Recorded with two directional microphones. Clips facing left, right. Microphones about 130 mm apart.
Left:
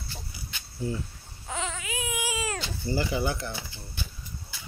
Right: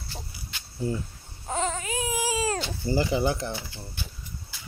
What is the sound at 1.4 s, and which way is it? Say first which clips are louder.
Baby cry: right 5 dB; 40° right (ahead or behind).